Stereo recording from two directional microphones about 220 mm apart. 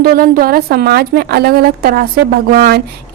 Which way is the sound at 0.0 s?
40° right (ahead or behind).